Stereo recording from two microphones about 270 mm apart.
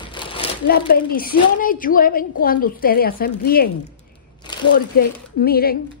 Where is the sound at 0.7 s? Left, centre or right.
Left.